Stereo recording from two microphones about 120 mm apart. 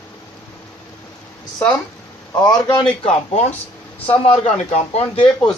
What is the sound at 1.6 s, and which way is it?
Speech, 15° left (ahead or behind).